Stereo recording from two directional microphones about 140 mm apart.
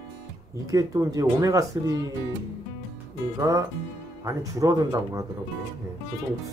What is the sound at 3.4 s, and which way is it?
Speech, 25° right (ahead or behind).